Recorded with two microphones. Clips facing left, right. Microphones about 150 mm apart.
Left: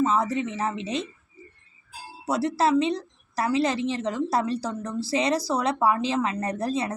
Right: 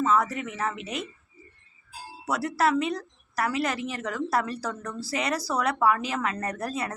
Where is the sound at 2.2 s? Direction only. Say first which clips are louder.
Left 2 dB; 25° left (ahead or behind).